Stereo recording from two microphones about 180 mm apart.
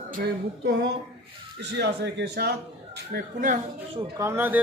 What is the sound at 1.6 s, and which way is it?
Speech, 75° right (ahead or behind).